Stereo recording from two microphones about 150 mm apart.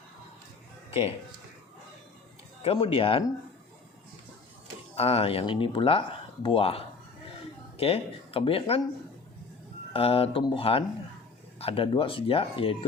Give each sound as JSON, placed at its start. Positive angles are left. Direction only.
{"t": 0.9, "sound": "a sound", "side_deg": 40}
{"t": 2.8, "sound": "speech", "side_deg": 40}
{"t": 4.9, "sound": "speech", "side_deg": 40}
{"t": 9.9, "sound": "speech", "side_deg": 40}